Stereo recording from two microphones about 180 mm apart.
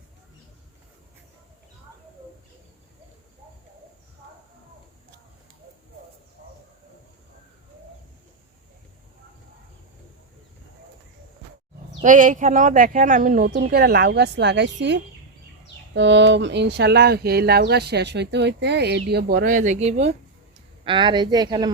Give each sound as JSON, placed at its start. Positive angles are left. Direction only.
{"t": 12.0, "sound": "speech", "side_deg": -45}
{"t": 16.0, "sound": "speech", "side_deg": -85}
{"t": 20.8, "sound": "speech", "side_deg": -25}